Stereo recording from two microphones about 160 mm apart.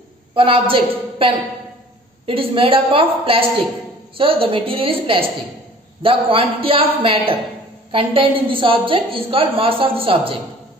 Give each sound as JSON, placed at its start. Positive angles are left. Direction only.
{"t": 0.3, "sound": "a woman's voice", "side_deg": -35}